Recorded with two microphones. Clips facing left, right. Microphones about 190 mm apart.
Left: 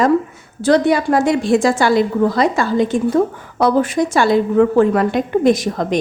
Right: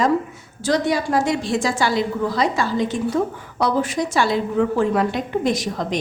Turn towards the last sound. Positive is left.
turn(degrees=50)  # may be behind; listen again after turning